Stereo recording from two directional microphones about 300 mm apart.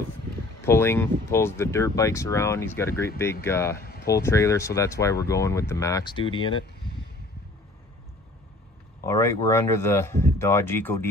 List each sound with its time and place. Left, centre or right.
0.7 s speech: centre
3.8 s a sound: left
4.2 s speech: centre
9.0 s speech: centre